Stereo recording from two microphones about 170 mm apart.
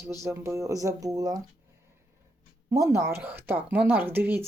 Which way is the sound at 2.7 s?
20° right (ahead or behind).